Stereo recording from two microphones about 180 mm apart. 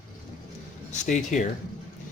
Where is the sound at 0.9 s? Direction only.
45° left (ahead or behind).